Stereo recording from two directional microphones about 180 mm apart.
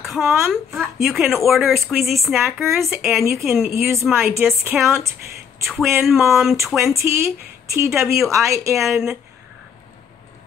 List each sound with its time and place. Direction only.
0.0 s speech: centre (ahead or behind)
7.0 s speech: 15° right (ahead or behind)
8.8 s speech: 5° right (ahead or behind)